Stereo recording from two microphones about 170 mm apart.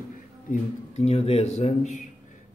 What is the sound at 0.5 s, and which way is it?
A man's voice, 40° left (ahead or behind).